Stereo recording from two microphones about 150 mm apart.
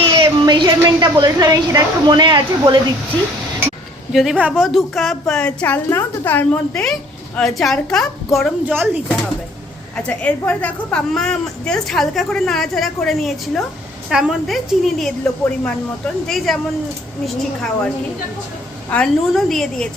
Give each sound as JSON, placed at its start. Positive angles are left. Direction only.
{"t": 0.0, "sound": "a woman's voice", "side_deg": -30}
{"t": 4.1, "sound": "a woman's voice", "side_deg": 0}
{"t": 8.6, "sound": "speech", "side_deg": -15}
{"t": 9.9, "sound": "a woman's voice", "side_deg": 10}